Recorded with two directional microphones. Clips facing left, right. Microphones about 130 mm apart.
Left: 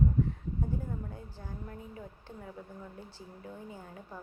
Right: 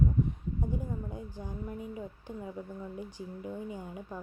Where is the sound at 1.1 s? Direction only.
15° right (ahead or behind).